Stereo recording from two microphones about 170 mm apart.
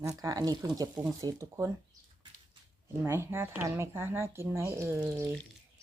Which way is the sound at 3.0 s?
15° right (ahead or behind).